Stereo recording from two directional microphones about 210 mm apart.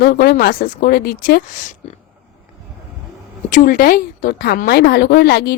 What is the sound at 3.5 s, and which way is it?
Speech, 40° left (ahead or behind).